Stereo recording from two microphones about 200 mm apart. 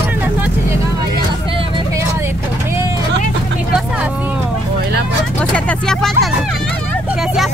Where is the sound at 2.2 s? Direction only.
15° right (ahead or behind).